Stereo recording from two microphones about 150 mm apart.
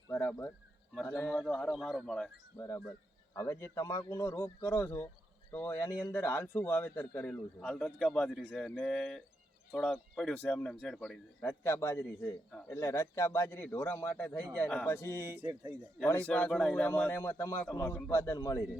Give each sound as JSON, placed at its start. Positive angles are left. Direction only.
{"t": 1.0, "sound": "speech", "side_deg": 15}
{"t": 1.3, "sound": "speech", "side_deg": 5}
{"t": 2.6, "sound": "speech", "side_deg": 20}
{"t": 11.4, "sound": "speech", "side_deg": 15}
{"t": 15.4, "sound": "speech", "side_deg": -15}
{"t": 16.2, "sound": "speech", "side_deg": 5}